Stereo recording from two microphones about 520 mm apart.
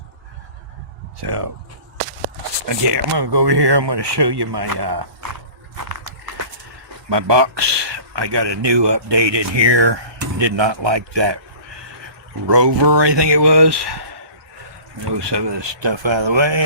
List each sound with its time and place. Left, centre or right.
1.2 s speech: right
2.6 s speech: right
7.1 s speech: right
15.0 s speech: right